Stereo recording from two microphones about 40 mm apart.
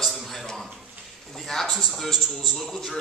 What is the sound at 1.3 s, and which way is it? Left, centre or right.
A man's voice, centre.